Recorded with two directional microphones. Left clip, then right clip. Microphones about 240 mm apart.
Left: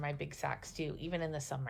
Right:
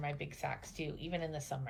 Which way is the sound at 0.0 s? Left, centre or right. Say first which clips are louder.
Left 1 dB; centre.